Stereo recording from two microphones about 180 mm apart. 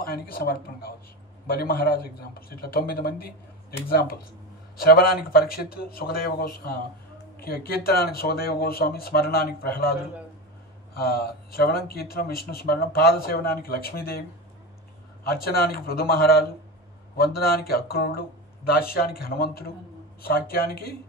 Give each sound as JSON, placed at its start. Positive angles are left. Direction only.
{"t": 0.0, "sound": "speech", "side_deg": 55}
{"t": 4.7, "sound": "speech", "side_deg": 55}
{"t": 11.0, "sound": "speech", "side_deg": 60}
{"t": 15.2, "sound": "speech", "side_deg": 55}